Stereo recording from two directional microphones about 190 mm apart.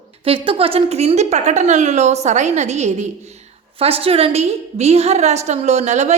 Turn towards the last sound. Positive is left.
turn(degrees=-35)  # may be behind; listen again after turning